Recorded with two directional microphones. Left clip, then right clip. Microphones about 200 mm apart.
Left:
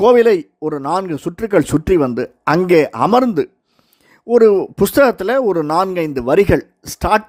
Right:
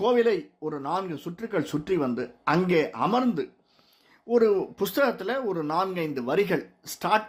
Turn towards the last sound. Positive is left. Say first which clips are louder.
# left 9 dB
turn(degrees=55)  # may be behind; listen again after turning